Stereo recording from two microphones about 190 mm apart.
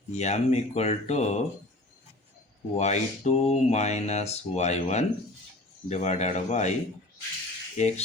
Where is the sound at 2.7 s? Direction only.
35° left (ahead or behind).